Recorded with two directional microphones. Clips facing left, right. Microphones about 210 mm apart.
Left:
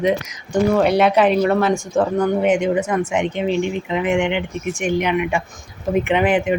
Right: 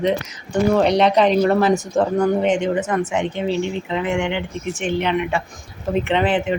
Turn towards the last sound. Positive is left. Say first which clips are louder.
# left 2 dB
turn(degrees=10)  # may be behind; listen again after turning